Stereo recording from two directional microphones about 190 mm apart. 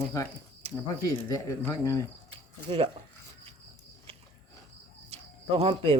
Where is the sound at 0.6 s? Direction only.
30° right (ahead or behind).